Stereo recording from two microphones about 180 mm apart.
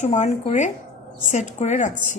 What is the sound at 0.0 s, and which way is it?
Speech, 40° left (ahead or behind).